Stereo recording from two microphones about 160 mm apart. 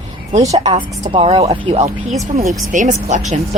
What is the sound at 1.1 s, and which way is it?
Speech, 35° right (ahead or behind).